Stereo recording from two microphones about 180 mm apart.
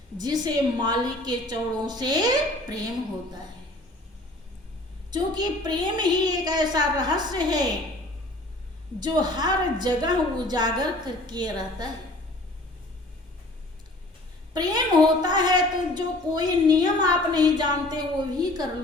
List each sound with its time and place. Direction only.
0.4 s a woman's voice: 25° right (ahead or behind)
5.1 s a woman's voice: 25° right (ahead or behind)
9.0 s a woman's voice: 25° right (ahead or behind)
14.5 s a woman's voice: 25° right (ahead or behind)